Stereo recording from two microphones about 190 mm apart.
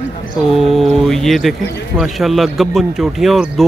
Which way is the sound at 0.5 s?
Centre (ahead or behind).